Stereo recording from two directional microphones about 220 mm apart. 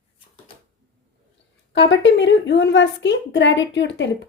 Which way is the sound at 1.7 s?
55° left (ahead or behind).